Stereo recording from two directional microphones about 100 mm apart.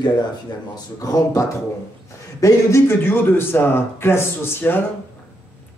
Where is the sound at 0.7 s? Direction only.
35° left (ahead or behind).